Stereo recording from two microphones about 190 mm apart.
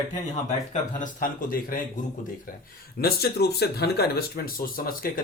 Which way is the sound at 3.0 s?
55° left (ahead or behind).